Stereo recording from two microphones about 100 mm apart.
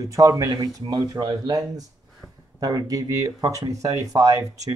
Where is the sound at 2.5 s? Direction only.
40° right (ahead or behind).